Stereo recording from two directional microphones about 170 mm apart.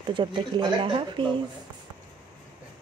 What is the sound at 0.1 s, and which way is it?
Speech, 30° right (ahead or behind).